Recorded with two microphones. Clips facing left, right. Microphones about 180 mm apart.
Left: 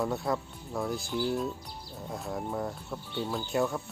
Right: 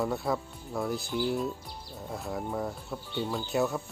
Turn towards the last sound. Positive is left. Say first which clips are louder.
# right 1 dB
turn(degrees=0)  # may be behind; listen again after turning